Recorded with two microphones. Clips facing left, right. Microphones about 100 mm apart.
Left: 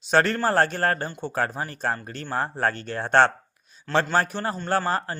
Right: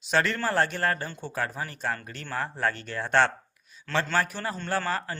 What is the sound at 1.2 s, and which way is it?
A man's voice, 25° left (ahead or behind).